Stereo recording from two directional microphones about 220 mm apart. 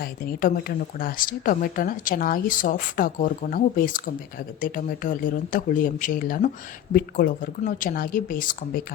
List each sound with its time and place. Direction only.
0.0 s a woman's voice: 40° left (ahead or behind)